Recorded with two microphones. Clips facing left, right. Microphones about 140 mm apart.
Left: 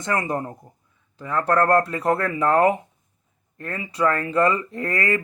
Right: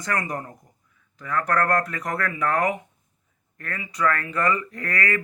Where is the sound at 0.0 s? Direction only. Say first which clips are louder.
Left 4 dB; 25° left (ahead or behind).